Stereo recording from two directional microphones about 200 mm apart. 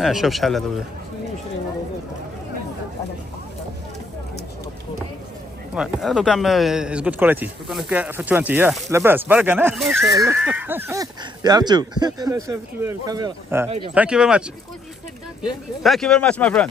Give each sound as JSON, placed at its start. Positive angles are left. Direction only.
{"t": 0.0, "sound": "speech", "side_deg": 0}
{"t": 5.8, "sound": "speech", "side_deg": 0}
{"t": 13.7, "sound": "speech", "side_deg": -25}
{"t": 13.9, "sound": "speech", "side_deg": -5}
{"t": 15.8, "sound": "speech", "side_deg": 0}